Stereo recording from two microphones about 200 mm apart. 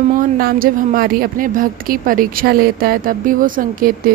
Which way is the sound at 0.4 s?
45° right (ahead or behind).